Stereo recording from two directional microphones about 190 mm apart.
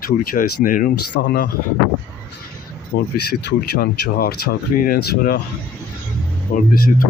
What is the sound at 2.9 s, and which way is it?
Speech, 50° left (ahead or behind).